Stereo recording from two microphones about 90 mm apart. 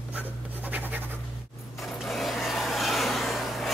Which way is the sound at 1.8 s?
Centre (ahead or behind).